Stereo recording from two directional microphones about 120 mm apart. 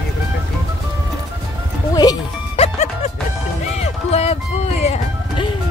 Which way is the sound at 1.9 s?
35° left (ahead or behind).